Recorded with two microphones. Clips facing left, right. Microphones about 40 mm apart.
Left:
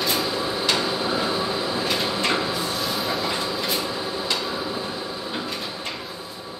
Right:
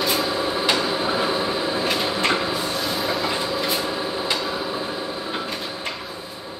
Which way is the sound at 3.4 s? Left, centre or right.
Centre.